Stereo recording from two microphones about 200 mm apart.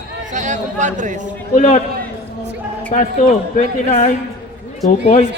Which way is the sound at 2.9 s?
40° left (ahead or behind).